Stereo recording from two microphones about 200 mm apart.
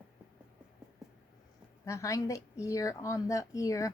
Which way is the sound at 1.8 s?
15° left (ahead or behind).